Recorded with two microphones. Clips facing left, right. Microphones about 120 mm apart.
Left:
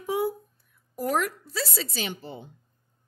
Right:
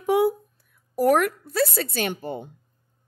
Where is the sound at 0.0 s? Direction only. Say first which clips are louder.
Right 7 dB; 70° right (ahead or behind).